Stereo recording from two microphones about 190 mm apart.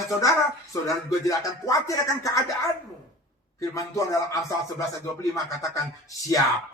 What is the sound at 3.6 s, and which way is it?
Speech, 15° left (ahead or behind).